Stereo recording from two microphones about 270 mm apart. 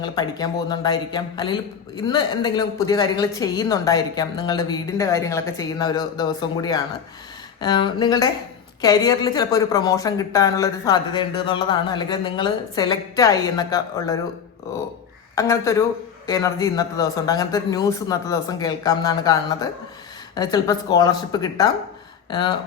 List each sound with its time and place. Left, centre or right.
0.0 s speech: centre
15.4 s speech: centre